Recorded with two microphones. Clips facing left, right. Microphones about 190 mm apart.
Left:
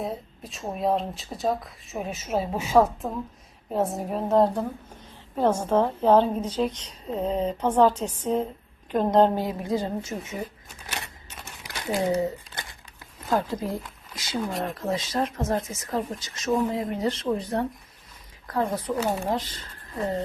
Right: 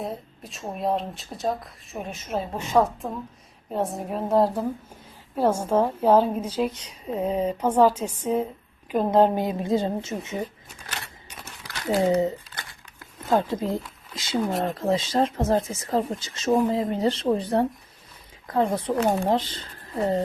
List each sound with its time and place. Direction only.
0.0 s a woman's voice: centre (ahead or behind); by 10.4 s 25° right (ahead or behind)
10.8 s scissors: 10° left (ahead or behind)
13.3 s speech: 20° right (ahead or behind)